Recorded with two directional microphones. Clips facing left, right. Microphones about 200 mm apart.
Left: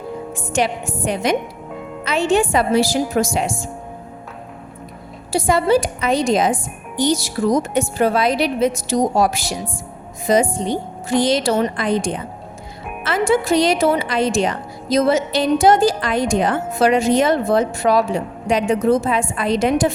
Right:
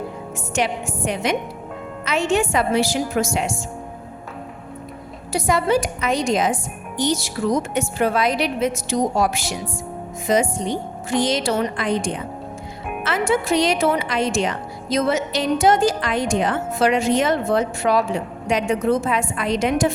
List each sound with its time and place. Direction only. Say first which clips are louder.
0.3 s a woman's voice: left 2 dB; 35° left (ahead or behind)
5.3 s a woman's voice: left 3 dB; 30° left (ahead or behind)
13.1 s a woman's voice: left 3 dB; 35° left (ahead or behind)